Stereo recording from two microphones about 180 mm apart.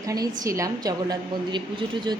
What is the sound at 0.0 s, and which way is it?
A woman's voice, 20° right (ahead or behind).